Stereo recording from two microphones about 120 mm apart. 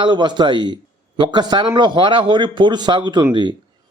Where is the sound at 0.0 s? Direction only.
40° right (ahead or behind).